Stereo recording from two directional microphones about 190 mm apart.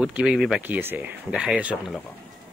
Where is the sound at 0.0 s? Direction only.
5° right (ahead or behind).